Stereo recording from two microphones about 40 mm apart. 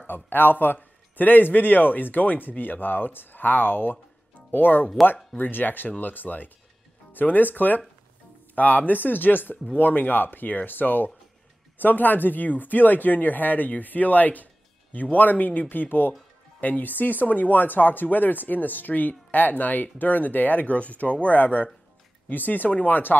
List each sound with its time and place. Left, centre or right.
0.0 s speech: left